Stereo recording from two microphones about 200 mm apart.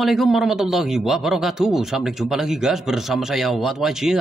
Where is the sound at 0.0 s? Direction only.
Centre (ahead or behind).